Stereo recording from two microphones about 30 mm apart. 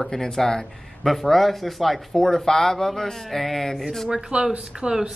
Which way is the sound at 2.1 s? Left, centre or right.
Centre.